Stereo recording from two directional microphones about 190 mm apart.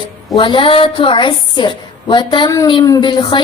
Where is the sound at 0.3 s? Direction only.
25° left (ahead or behind).